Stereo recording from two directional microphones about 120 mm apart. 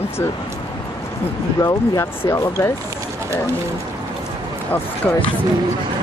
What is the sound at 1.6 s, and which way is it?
Speech, 30° left (ahead or behind).